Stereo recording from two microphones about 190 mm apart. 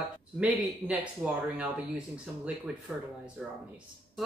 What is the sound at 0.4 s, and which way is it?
Speech, 5° right (ahead or behind).